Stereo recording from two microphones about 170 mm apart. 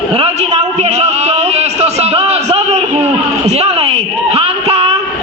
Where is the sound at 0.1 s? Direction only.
40° right (ahead or behind).